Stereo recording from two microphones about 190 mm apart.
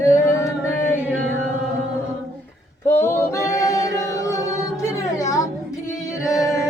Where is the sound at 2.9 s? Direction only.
10° left (ahead or behind).